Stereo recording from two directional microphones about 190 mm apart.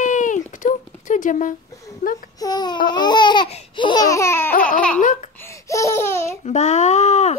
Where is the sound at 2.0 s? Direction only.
50° left (ahead or behind).